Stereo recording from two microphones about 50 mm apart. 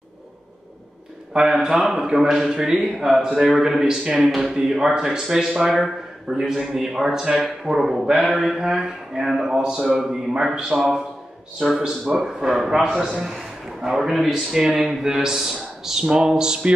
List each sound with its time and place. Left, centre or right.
1.3 s speech: centre
3.4 s a man's voice: centre
3.8 s a man's voice: centre
4.2 s a man's voice: centre
12.1 s speech: centre